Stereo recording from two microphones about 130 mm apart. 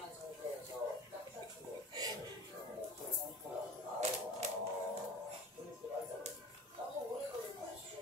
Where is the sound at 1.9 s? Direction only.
30° right (ahead or behind).